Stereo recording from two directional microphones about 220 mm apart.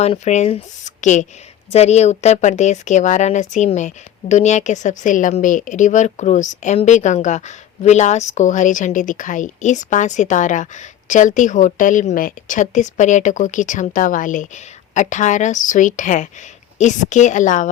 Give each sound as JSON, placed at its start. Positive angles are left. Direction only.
{"t": 0.0, "sound": "speech", "side_deg": 30}